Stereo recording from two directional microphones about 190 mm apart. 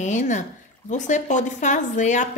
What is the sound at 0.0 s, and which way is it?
Speech, 40° left (ahead or behind).